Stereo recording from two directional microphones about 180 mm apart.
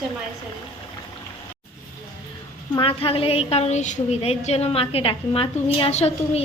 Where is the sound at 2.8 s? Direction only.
30° left (ahead or behind).